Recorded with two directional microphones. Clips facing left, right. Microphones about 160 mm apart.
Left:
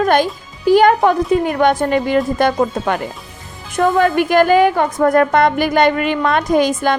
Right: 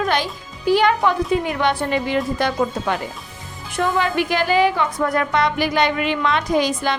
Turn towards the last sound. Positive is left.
turn(degrees=50)  # may be behind; listen again after turning